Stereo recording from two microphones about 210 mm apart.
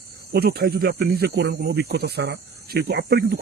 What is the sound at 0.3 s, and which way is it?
Speech, 50° right (ahead or behind).